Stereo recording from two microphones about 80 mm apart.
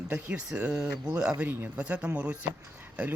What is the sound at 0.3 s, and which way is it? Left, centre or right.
Speech, centre.